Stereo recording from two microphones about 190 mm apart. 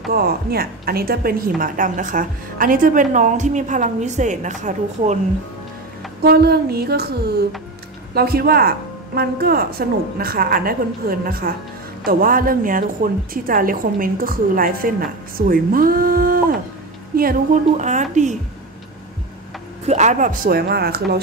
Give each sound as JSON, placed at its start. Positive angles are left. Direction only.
{"t": 0.1, "sound": "a woman's voice", "side_deg": -55}
{"t": 6.2, "sound": "music", "side_deg": -55}
{"t": 8.1, "sound": "a woman's voice", "side_deg": -55}
{"t": 19.9, "sound": "a woman's voice", "side_deg": -40}